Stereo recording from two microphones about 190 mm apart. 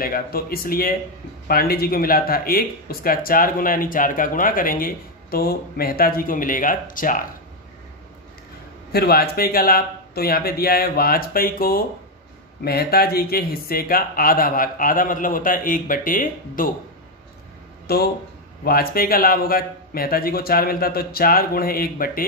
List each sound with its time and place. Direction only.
0.0 s speech: 50° left (ahead or behind)
8.9 s speech: 55° left (ahead or behind)
17.8 s speech: 55° left (ahead or behind)